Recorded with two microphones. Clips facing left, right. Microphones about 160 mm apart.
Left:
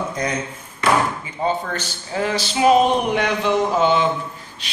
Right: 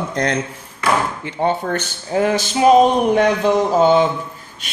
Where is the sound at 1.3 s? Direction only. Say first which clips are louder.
Right 4 dB; 60° right (ahead or behind).